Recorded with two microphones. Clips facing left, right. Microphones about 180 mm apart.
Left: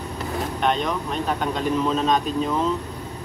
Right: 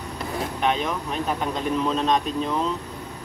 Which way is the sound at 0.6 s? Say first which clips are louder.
Left 1 dB; 5° right (ahead or behind).